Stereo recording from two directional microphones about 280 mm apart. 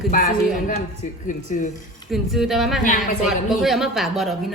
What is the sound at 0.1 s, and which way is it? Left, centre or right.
Speech, left.